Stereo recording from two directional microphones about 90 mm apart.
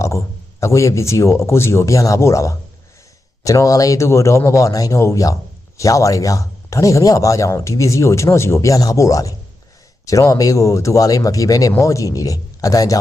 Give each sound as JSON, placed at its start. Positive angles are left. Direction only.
{"t": 0.6, "sound": "speech", "side_deg": 35}